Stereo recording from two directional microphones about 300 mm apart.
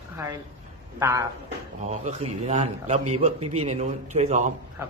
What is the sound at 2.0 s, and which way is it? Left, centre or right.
A man's voice, right.